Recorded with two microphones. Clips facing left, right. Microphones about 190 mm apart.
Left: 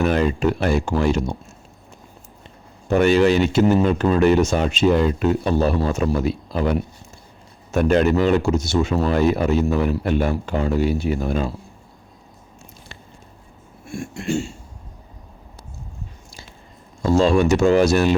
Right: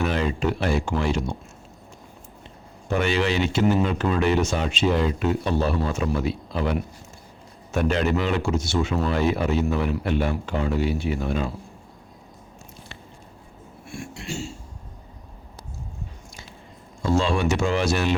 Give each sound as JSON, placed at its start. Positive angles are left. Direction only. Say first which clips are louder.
{"t": 0.0, "sound": "speech", "louder": "left 5 dB", "side_deg": 45}
{"t": 2.9, "sound": "speech", "louder": "left 7 dB", "side_deg": 45}
{"t": 13.8, "sound": "a sound", "louder": "left 8 dB", "side_deg": 45}
{"t": 17.0, "sound": "speech", "louder": "left 6 dB", "side_deg": 40}